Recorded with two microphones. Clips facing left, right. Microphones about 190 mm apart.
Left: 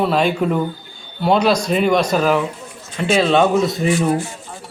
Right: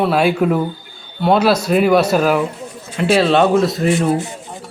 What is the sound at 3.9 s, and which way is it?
Speech, 20° right (ahead or behind).